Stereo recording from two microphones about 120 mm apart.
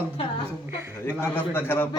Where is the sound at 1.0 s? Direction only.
15° left (ahead or behind).